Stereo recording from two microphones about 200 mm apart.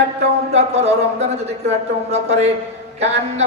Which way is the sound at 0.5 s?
30° right (ahead or behind).